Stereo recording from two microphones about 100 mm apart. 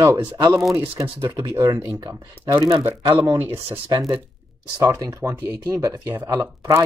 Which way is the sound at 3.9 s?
40° right (ahead or behind).